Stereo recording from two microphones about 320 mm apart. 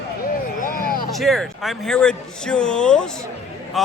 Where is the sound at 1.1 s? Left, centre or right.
Centre.